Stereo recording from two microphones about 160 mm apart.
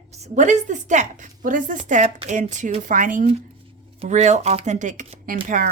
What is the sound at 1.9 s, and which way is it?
A woman's voice, 45° right (ahead or behind).